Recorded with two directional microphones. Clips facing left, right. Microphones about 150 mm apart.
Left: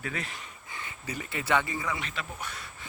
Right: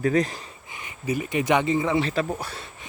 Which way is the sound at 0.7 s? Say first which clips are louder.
Right 10 dB; 15° right (ahead or behind).